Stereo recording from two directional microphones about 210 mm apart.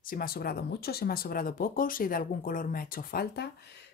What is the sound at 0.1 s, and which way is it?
A woman's voice, 45° left (ahead or behind).